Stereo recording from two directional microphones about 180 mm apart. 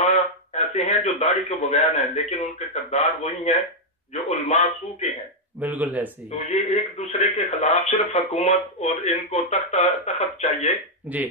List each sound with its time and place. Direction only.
0.0 s a man's voice: 35° left (ahead or behind)
5.6 s speech: 10° right (ahead or behind)
6.3 s speech: 35° left (ahead or behind)